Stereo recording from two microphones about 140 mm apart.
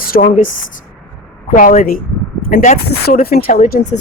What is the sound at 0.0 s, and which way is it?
Speech, 90° left.